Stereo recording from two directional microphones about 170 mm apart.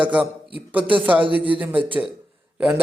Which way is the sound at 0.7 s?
10° right (ahead or behind).